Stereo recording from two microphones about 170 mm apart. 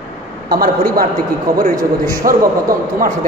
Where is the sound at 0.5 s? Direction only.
60° right (ahead or behind).